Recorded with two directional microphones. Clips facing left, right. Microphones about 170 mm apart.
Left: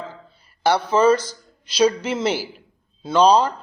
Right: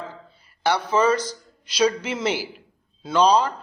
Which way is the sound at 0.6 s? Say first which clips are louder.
Left 3 dB; 30° left (ahead or behind).